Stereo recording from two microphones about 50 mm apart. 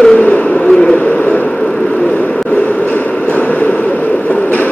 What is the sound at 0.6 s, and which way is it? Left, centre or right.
Speech, centre.